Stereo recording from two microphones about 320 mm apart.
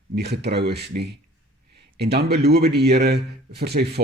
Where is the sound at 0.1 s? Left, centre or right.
Right.